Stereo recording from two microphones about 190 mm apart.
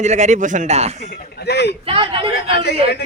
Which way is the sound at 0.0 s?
40° right (ahead or behind).